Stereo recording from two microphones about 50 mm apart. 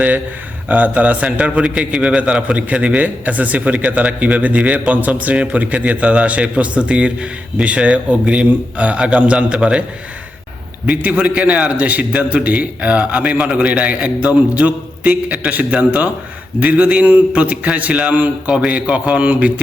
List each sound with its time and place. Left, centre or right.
0.7 s a man's voice: right
11.2 s a man's voice: right
13.4 s a man's voice: centre
13.7 s a man's voice: right